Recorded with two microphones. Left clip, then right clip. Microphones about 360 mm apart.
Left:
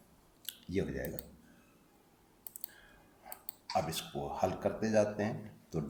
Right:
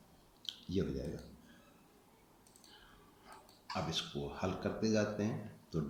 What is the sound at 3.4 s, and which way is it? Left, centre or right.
Speech, centre.